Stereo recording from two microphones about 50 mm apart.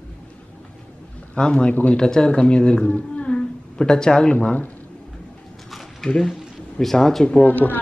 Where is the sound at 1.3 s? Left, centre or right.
Centre.